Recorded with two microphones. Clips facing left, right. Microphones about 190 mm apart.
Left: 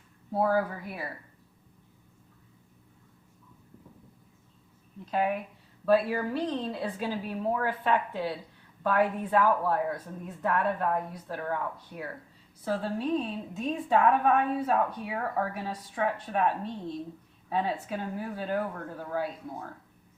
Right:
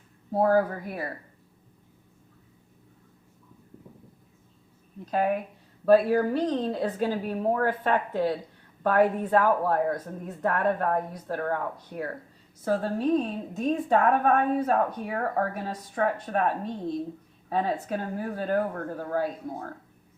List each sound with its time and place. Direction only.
0.3 s a woman's voice: 45° right (ahead or behind)
5.1 s a woman's voice: 45° right (ahead or behind)